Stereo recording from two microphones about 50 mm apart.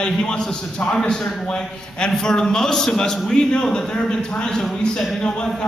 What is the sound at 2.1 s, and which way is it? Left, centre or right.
Speech, centre.